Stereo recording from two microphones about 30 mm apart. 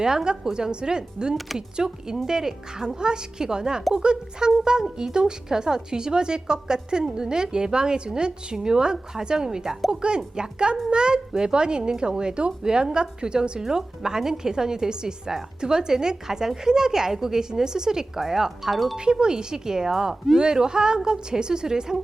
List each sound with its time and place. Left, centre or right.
0.5 s a woman's voice: right
9.9 s a woman's voice: right
13.6 s a woman's voice: centre
18.7 s speech: centre
19.2 s a woman's voice: right